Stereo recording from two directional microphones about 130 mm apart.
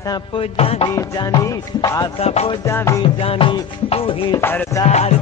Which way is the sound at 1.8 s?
25° left (ahead or behind).